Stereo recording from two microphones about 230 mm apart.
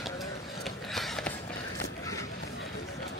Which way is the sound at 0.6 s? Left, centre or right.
Centre.